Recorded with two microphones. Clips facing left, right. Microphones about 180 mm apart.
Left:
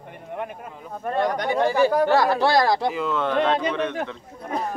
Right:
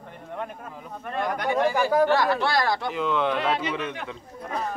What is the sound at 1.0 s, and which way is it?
Speech, 35° left (ahead or behind).